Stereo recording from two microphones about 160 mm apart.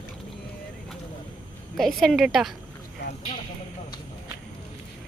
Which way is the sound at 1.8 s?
Centre (ahead or behind).